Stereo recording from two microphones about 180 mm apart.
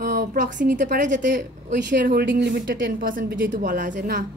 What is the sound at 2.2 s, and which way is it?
Speech, 70° right (ahead or behind).